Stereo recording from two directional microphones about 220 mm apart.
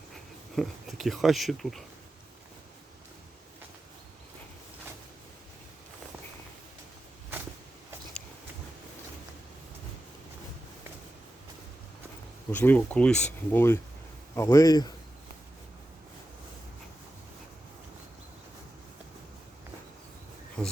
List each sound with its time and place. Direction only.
0.5 s speech: centre (ahead or behind)
12.5 s speech: 10° left (ahead or behind)
20.6 s insect: 5° left (ahead or behind)